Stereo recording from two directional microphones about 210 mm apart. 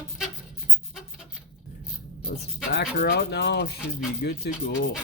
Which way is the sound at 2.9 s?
50° left (ahead or behind).